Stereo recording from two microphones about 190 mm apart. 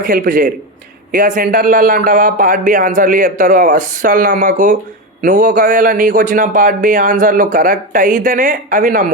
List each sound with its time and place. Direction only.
0.0 s a man's voice: 45° right (ahead or behind)